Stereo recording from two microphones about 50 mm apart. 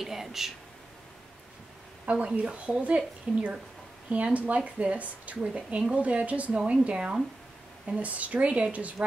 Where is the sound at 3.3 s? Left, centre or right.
Centre.